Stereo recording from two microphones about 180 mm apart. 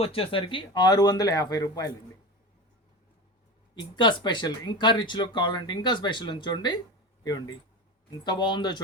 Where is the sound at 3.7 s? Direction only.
25° left (ahead or behind).